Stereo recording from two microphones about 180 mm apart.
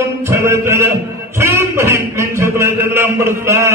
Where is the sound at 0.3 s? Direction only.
15° right (ahead or behind).